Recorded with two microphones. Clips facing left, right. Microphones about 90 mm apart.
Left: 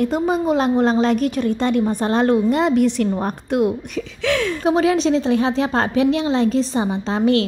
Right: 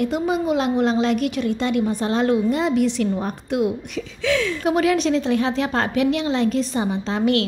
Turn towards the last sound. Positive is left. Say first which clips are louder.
# left 3 dB
turn(degrees=30)  # may be behind; listen again after turning